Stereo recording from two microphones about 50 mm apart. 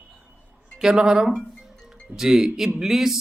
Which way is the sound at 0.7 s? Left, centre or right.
Centre.